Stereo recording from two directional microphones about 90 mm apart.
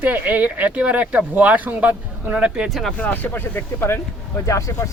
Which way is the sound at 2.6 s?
Centre (ahead or behind).